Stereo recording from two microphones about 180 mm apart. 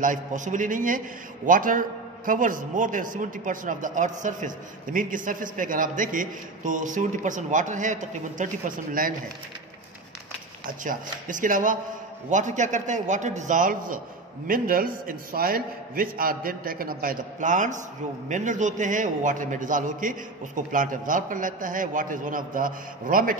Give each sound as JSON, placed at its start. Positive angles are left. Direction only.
{"t": 0.0, "sound": "a man's voice", "side_deg": -45}
{"t": 10.8, "sound": "a man's voice", "side_deg": -45}